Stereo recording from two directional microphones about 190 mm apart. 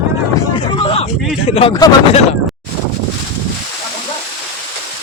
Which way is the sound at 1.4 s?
30° left (ahead or behind).